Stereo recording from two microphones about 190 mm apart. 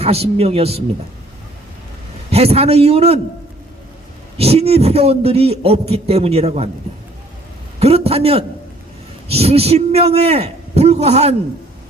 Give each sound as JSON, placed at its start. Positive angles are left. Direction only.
{"t": 0.0, "sound": "a man's voice", "side_deg": -30}
{"t": 2.3, "sound": "a man's voice", "side_deg": -30}
{"t": 4.4, "sound": "a man's voice", "side_deg": -30}
{"t": 7.8, "sound": "a man's voice", "side_deg": -30}